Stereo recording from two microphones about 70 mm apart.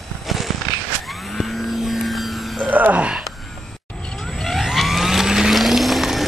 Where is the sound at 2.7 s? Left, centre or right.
Right.